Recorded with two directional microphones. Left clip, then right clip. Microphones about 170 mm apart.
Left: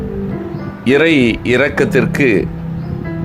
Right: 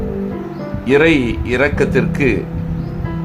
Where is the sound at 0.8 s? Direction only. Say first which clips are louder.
Left 1 dB; 30° left (ahead or behind).